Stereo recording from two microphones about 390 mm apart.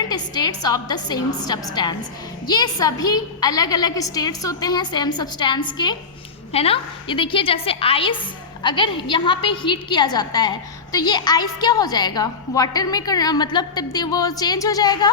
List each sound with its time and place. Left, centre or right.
0.1 s a woman's voice: centre